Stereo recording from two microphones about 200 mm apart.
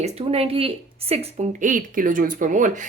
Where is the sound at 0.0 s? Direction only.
30° right (ahead or behind).